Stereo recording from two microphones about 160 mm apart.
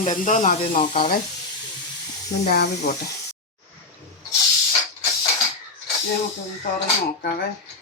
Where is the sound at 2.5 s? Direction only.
90° left.